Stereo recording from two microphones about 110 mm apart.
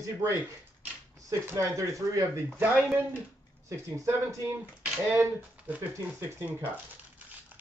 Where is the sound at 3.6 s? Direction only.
30° right (ahead or behind).